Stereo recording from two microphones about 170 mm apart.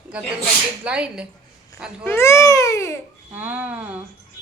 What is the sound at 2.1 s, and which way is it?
Babbling, 15° left (ahead or behind).